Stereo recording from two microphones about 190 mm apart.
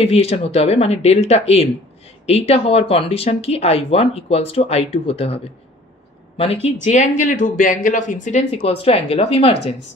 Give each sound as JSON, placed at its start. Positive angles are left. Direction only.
{"t": 0.0, "sound": "speech", "side_deg": 30}